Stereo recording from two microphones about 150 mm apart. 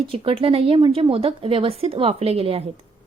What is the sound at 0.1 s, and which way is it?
A woman's voice, 40° right (ahead or behind).